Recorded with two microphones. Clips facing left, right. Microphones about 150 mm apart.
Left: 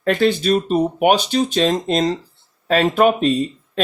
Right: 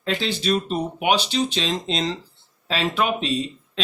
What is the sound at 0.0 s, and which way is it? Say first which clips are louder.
Speech: left 8 dB; 55° left (ahead or behind).